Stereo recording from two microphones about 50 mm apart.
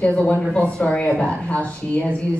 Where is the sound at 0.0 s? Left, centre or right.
Left.